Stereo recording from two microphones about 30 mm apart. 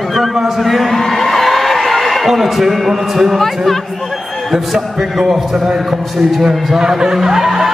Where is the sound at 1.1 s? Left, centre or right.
Centre.